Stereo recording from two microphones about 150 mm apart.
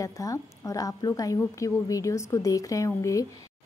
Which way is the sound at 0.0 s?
20° left (ahead or behind).